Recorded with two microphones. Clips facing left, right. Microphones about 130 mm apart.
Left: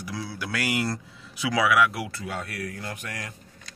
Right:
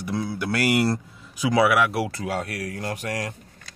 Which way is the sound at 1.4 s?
30° right (ahead or behind).